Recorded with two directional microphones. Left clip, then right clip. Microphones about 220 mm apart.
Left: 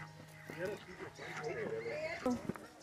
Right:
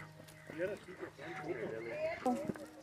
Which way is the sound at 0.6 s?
50° right (ahead or behind).